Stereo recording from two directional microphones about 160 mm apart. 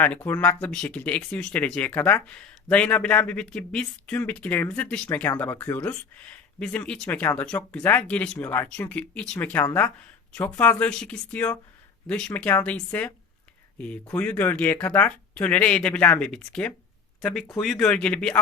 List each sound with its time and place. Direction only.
0.3 s speech: 10° left (ahead or behind)